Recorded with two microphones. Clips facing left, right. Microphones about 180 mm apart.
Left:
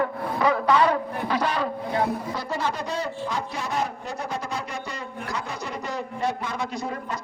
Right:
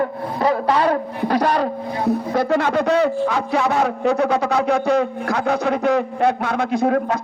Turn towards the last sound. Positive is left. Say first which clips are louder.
# right 13 dB
turn(degrees=-65)  # may be behind; listen again after turning